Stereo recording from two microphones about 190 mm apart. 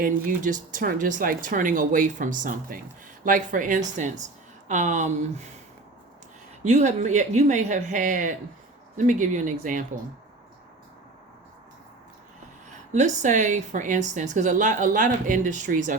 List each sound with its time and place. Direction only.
0.0 s a woman's voice: 45° right (ahead or behind)
6.7 s a woman's voice: 35° right (ahead or behind)
12.9 s a woman's voice: 40° right (ahead or behind)